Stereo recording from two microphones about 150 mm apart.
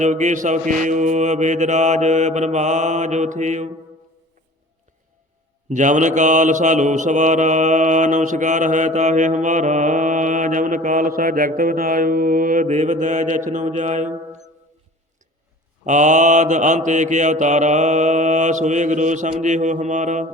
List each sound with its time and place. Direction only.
0.0 s mantra: 55° right (ahead or behind)
5.6 s mantra: 55° right (ahead or behind)
15.9 s mantra: 55° right (ahead or behind)